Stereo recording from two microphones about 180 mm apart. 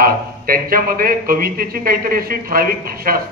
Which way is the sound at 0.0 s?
55° right (ahead or behind).